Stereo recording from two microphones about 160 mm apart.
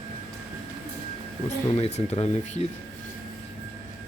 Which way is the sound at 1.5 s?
45° left (ahead or behind).